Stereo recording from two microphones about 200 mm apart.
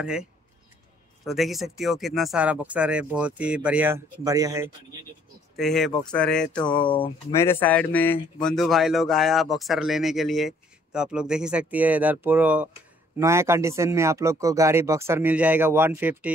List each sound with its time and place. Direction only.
0.0 s speech: 5° right (ahead or behind)
5.6 s speech: centre (ahead or behind)
6.6 s speech: 25° left (ahead or behind)
7.3 s speech: 10° left (ahead or behind); by 16.3 s 10° right (ahead or behind)